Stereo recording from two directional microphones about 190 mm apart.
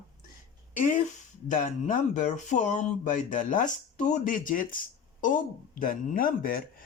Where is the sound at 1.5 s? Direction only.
40° left (ahead or behind).